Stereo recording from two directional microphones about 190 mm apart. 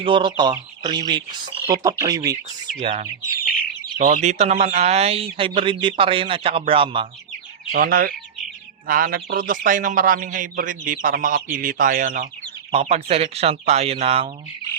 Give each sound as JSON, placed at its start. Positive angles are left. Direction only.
{"t": 0.0, "sound": "speech", "side_deg": -25}
{"t": 2.8, "sound": "speech", "side_deg": -40}
{"t": 7.7, "sound": "speech", "side_deg": -50}